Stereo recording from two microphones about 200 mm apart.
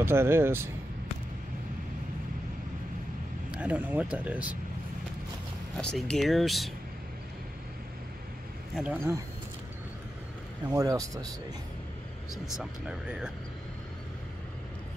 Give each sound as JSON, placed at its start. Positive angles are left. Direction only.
{"t": 0.0, "sound": "speech", "side_deg": -10}
{"t": 3.5, "sound": "speech", "side_deg": -5}
{"t": 5.8, "sound": "speech", "side_deg": 5}
{"t": 8.7, "sound": "speech", "side_deg": -5}
{"t": 10.7, "sound": "speech", "side_deg": -15}
{"t": 12.5, "sound": "speech", "side_deg": -5}